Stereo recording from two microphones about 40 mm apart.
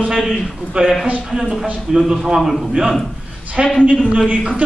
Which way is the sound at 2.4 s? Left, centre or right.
Centre.